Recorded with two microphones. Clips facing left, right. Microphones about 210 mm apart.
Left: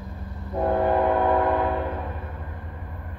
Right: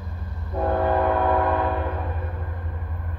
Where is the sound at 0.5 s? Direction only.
15° left (ahead or behind).